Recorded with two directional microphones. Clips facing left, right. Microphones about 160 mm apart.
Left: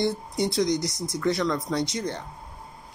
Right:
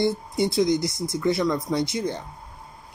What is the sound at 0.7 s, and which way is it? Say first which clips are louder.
Speech: right 3 dB; 15° left (ahead or behind).